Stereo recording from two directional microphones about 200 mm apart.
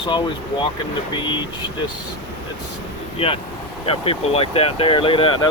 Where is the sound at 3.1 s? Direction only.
25° left (ahead or behind).